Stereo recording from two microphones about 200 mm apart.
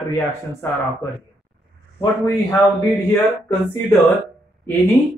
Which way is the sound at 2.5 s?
15° left (ahead or behind).